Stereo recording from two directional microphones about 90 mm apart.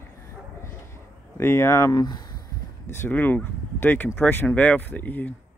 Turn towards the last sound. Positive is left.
turn(degrees=20)  # may be behind; listen again after turning